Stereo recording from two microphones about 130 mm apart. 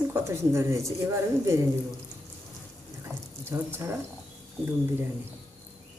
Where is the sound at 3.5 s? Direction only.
20° right (ahead or behind).